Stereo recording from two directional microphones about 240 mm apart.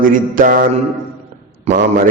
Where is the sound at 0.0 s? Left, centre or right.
Right.